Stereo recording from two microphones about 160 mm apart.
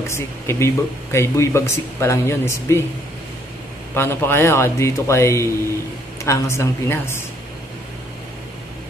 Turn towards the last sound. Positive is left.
turn(degrees=15)  # may be behind; listen again after turning